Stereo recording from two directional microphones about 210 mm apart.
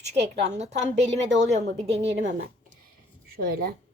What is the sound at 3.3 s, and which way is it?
Speech, 45° right (ahead or behind).